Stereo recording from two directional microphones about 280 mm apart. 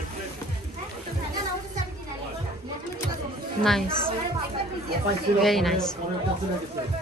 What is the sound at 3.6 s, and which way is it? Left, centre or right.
Speech, centre.